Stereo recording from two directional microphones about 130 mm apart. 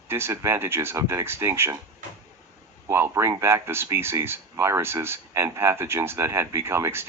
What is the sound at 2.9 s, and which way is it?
Speech, 20° right (ahead or behind).